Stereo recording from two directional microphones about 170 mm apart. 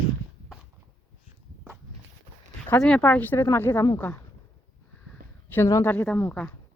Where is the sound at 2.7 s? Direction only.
10° left (ahead or behind).